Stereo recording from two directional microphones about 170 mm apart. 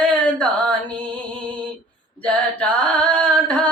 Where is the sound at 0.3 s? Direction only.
10° left (ahead or behind).